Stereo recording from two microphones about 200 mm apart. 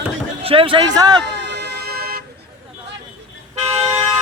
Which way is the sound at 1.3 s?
60° right (ahead or behind).